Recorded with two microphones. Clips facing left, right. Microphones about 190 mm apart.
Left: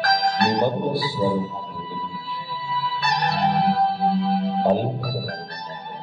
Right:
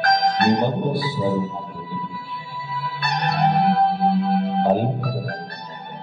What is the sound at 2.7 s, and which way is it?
Music, 55° right (ahead or behind).